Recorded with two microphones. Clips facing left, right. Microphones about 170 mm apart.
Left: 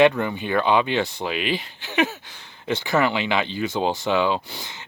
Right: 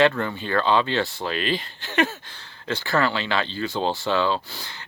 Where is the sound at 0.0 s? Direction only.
15° left (ahead or behind).